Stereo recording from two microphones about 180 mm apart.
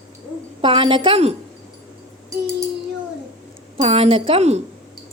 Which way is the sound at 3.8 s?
35° right (ahead or behind).